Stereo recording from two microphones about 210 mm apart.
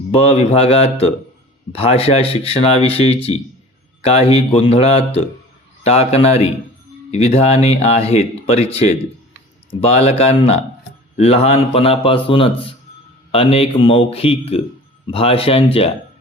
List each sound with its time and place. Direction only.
0.1 s speech: 30° left (ahead or behind)